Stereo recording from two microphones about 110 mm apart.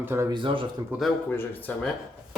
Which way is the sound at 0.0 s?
20° right (ahead or behind).